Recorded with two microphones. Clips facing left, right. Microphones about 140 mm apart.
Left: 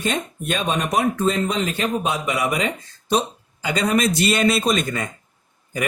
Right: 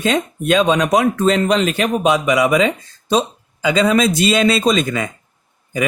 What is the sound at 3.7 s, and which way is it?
Speech, 90° right.